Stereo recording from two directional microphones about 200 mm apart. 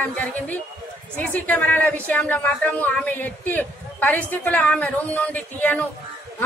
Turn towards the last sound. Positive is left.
turn(degrees=10)  # may be behind; listen again after turning